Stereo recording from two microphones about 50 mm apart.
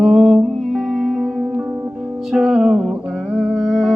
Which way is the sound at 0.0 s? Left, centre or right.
Centre.